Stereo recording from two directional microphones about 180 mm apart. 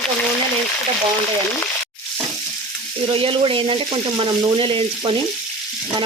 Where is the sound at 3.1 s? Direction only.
30° right (ahead or behind).